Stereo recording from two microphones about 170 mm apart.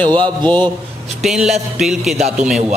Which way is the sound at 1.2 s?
Centre (ahead or behind).